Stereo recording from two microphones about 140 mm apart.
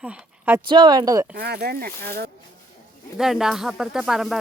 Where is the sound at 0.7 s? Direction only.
30° right (ahead or behind).